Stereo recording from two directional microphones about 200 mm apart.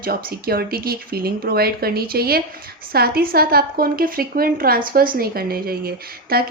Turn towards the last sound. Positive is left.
turn(degrees=-50)  # may be behind; listen again after turning